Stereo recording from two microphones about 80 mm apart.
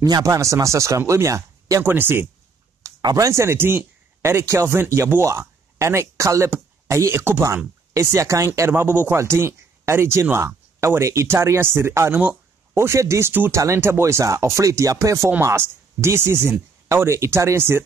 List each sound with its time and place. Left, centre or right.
0.0 s speech: right
1.8 s speech: right
2.8 s speech: right
8.5 s speech: right